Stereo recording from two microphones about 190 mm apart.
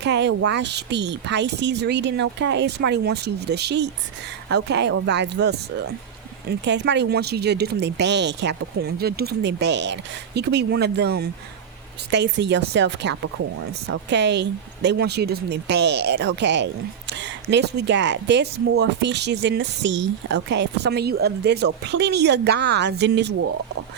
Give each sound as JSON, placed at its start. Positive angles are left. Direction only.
{"t": 0.0, "sound": "speech", "side_deg": -65}